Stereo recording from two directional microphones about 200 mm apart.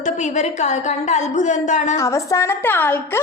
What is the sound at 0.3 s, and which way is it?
A woman's voice, 35° left (ahead or behind).